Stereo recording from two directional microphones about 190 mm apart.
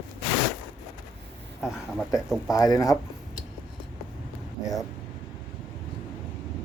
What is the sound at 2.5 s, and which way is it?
Speech, 20° left (ahead or behind).